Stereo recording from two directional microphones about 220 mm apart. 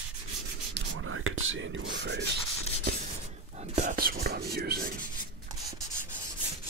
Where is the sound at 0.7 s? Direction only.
65° right (ahead or behind).